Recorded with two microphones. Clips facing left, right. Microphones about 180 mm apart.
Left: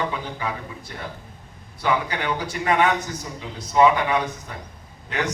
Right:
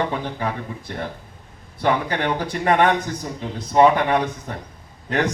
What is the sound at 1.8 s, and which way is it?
Speech, 45° right (ahead or behind).